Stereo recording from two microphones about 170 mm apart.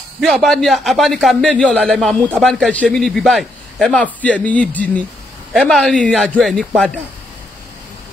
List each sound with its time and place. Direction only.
0.2 s a man's voice: centre (ahead or behind)